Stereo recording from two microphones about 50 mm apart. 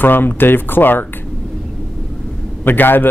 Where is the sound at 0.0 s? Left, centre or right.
Left.